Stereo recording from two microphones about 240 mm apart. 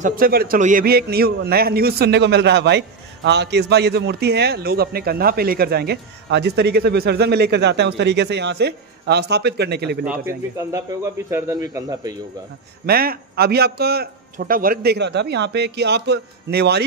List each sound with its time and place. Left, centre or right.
0.0 s a man's voice: right
10.0 s speech: centre
12.8 s a man's voice: right